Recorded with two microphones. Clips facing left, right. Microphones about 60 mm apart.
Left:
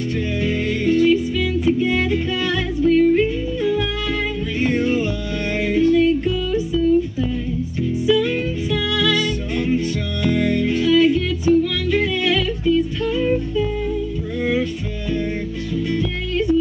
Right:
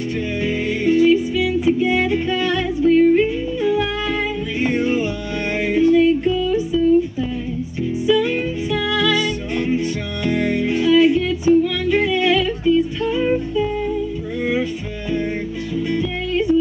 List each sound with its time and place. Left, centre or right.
0.4 s music: centre
8.1 s music: centre